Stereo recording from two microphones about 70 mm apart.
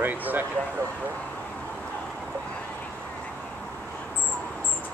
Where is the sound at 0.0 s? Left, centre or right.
Right.